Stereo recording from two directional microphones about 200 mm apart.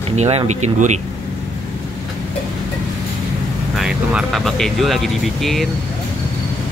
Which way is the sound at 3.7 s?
5° right (ahead or behind).